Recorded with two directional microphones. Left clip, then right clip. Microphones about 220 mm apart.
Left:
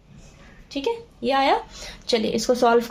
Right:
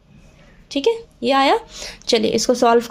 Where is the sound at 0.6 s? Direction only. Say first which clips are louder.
Right 7 dB; 40° right (ahead or behind); by 2.9 s 25° right (ahead or behind).